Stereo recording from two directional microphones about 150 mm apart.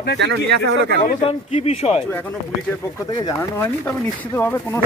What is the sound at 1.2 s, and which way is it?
Speech, 40° left (ahead or behind).